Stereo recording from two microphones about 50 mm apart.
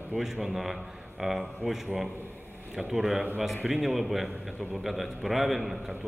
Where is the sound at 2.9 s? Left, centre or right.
Centre.